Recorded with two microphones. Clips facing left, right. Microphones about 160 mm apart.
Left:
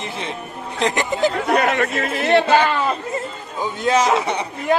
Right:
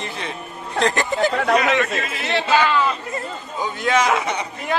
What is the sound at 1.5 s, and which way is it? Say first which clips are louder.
A man's voice: even; 55° left (ahead or behind).